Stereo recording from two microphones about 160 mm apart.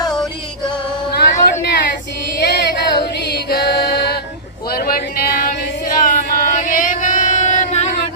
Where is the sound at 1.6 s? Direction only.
90° left.